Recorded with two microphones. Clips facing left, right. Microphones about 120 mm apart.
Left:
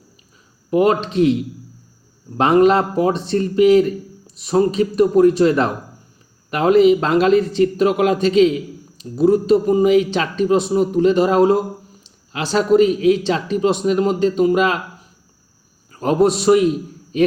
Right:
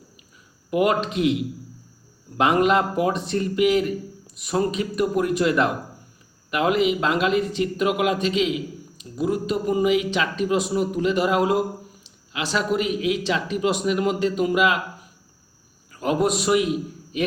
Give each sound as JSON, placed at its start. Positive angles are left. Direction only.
{"t": 0.7, "sound": "speech", "side_deg": 30}
{"t": 2.4, "sound": "speech", "side_deg": 35}
{"t": 15.9, "sound": "a man's voice", "side_deg": 35}